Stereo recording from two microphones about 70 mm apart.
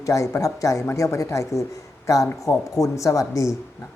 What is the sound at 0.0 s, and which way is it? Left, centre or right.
A woman's voice, left.